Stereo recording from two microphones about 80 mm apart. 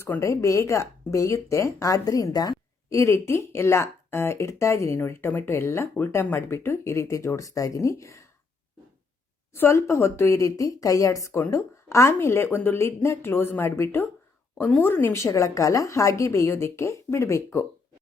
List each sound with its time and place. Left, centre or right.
0.2 s speech: left
2.9 s a woman's voice: left
9.5 s a woman's voice: left
12.8 s speech: left
15.1 s a woman's voice: left